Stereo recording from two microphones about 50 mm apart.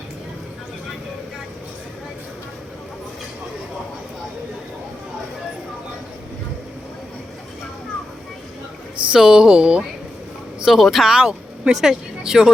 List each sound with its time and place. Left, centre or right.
9.1 s speech: centre
10.7 s speech: centre
11.1 s speech: centre